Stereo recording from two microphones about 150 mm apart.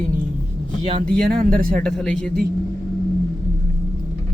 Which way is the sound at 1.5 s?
75° right (ahead or behind).